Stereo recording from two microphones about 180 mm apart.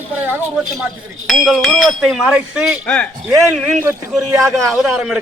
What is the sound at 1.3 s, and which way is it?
Speech, centre (ahead or behind).